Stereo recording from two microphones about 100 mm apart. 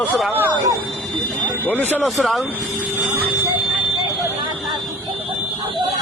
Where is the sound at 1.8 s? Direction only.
15° left (ahead or behind).